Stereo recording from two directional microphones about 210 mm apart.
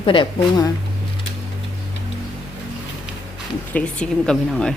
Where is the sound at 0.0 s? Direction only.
25° left (ahead or behind).